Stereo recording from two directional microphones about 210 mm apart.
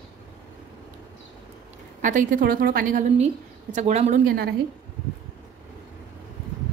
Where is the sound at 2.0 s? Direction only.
40° right (ahead or behind).